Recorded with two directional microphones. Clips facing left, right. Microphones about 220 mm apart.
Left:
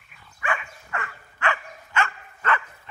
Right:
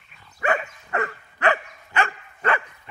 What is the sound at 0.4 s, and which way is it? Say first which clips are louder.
Dog: right 7 dB; 40° right (ahead or behind).